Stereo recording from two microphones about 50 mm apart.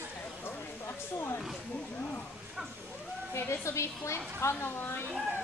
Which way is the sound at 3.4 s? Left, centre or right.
Left.